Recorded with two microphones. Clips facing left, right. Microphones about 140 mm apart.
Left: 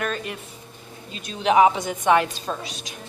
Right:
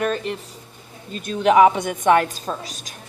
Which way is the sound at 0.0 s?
30° right (ahead or behind).